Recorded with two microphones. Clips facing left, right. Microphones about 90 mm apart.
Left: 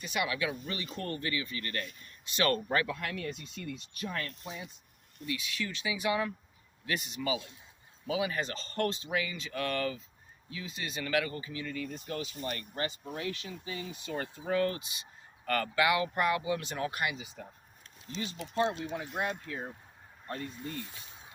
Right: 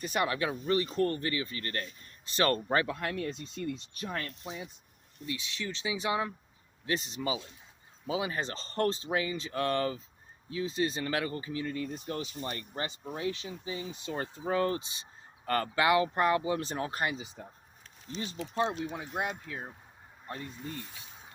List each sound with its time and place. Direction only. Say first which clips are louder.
0.0 s speech: right 2 dB; 40° right (ahead or behind); by 20.5 s 10° right (ahead or behind)